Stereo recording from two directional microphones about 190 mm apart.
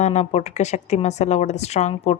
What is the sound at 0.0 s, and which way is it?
Speech, 35° left (ahead or behind).